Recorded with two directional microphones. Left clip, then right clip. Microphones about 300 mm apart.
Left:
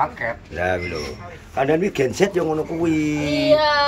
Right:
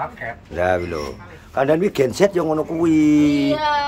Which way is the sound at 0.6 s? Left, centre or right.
Centre.